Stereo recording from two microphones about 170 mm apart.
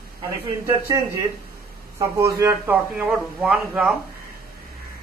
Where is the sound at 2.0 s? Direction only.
20° right (ahead or behind).